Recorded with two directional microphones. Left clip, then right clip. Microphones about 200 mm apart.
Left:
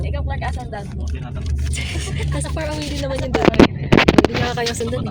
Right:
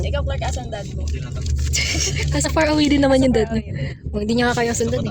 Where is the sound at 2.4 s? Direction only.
30° right (ahead or behind).